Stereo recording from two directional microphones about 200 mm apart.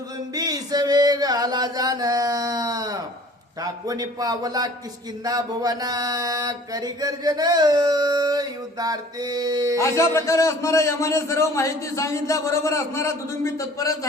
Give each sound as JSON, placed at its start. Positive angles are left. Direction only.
{"t": 0.3, "sound": "music", "side_deg": -20}
{"t": 3.6, "sound": "a man's voice", "side_deg": -20}
{"t": 5.2, "sound": "a sound", "side_deg": -20}
{"t": 9.8, "sound": "a man's voice", "side_deg": 15}